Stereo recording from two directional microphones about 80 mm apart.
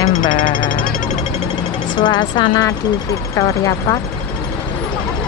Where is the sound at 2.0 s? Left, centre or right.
Left.